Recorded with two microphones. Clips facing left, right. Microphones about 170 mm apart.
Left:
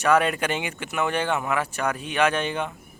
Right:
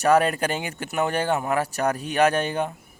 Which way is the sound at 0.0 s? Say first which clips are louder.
Right 2 dB; 35° right (ahead or behind).